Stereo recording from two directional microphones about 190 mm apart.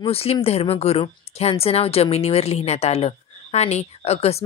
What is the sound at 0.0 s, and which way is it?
A woman's voice, 30° left (ahead or behind).